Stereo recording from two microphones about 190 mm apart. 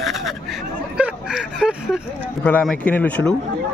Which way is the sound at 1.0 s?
5° right (ahead or behind).